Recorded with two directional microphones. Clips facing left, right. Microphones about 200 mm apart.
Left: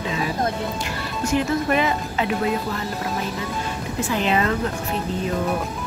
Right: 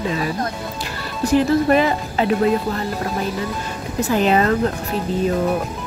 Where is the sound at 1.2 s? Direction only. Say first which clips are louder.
Right 6 dB; 35° right (ahead or behind).